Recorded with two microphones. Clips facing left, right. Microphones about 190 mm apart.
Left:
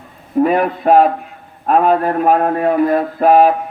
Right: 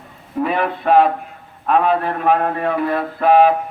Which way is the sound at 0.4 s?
45° left (ahead or behind).